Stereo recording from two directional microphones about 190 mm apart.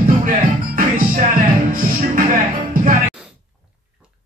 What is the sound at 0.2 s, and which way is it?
Music, 45° right (ahead or behind).